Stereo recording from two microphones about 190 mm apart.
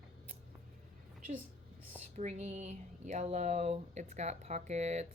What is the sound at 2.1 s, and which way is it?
Speech, 35° right (ahead or behind).